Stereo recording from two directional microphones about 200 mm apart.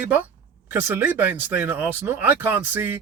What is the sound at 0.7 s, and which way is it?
Speech, 10° right (ahead or behind).